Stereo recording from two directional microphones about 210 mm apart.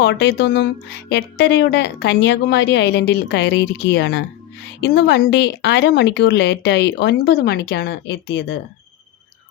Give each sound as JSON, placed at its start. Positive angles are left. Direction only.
{"t": 0.0, "sound": "speech", "side_deg": 55}